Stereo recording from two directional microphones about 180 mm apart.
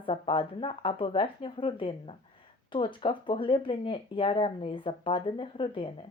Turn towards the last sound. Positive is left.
turn(degrees=30)  # may be behind; listen again after turning